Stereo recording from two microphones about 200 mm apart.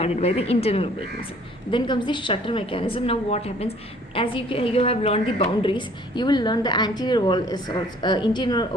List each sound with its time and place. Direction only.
0.0 s a woman's voice: 30° left (ahead or behind)